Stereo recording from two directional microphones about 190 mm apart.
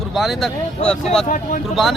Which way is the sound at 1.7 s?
Centre (ahead or behind).